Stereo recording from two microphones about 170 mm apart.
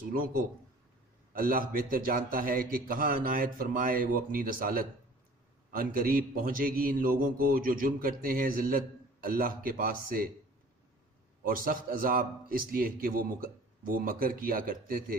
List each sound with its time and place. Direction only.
0.1 s a man's voice: 55° right (ahead or behind)
11.4 s a man's voice: 55° right (ahead or behind)